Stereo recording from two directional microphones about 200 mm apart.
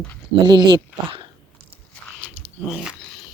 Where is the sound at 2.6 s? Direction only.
5° right (ahead or behind).